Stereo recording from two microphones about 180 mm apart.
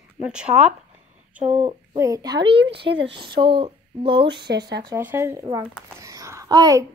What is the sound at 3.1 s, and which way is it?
Speech, 25° right (ahead or behind).